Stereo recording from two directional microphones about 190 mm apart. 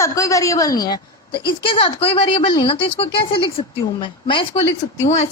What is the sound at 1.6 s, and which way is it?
A woman's voice, 30° left (ahead or behind).